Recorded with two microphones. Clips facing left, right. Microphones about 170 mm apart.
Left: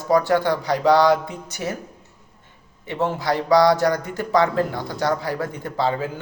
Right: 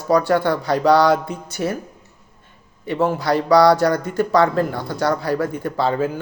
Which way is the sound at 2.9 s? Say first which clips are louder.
Right 4 dB; 20° left (ahead or behind).